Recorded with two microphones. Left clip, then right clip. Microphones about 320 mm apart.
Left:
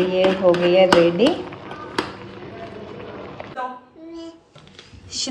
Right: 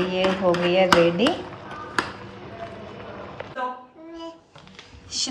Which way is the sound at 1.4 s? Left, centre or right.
Left.